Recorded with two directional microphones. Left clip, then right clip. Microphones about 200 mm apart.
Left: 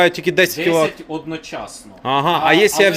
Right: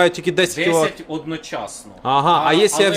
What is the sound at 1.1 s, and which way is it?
Speech, 15° right (ahead or behind).